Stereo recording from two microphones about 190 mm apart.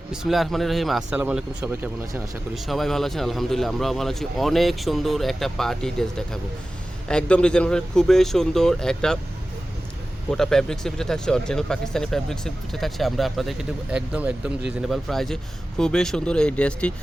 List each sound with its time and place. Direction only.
0.1 s speech: centre (ahead or behind)
10.3 s speech: centre (ahead or behind)